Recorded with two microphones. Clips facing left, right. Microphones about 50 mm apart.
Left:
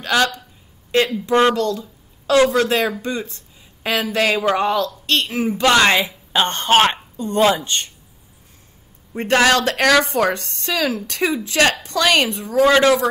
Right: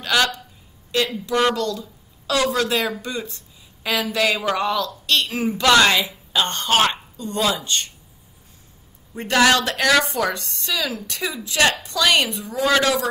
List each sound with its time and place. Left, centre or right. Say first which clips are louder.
0.0 s a woman's voice: left 2 dB; left
9.1 s a woman's voice: left 2 dB; left